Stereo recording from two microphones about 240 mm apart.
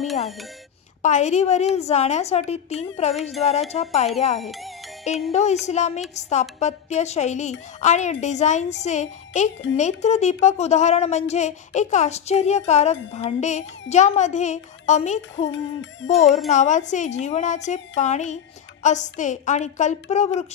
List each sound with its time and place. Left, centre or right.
1.0 s a woman's voice: left
3.2 s speech: centre
3.4 s a woman's voice: left
4.4 s speech: centre
5.3 s a woman's voice: left
15.5 s music: left
16.1 s speech: centre
16.4 s a woman's voice: left